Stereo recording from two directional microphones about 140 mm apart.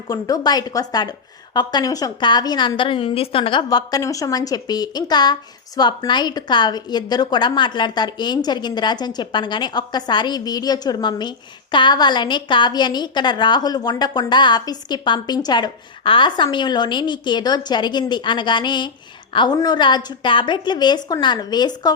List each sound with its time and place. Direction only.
0.1 s a woman's voice: 25° left (ahead or behind)